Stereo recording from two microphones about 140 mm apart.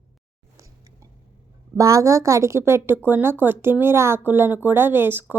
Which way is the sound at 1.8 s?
25° right (ahead or behind).